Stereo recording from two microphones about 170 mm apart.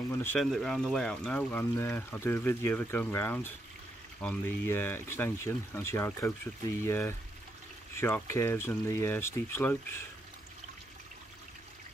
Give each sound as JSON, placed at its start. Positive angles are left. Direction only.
{"t": 0.1, "sound": "speech", "side_deg": 15}
{"t": 0.4, "sound": "speech", "side_deg": 0}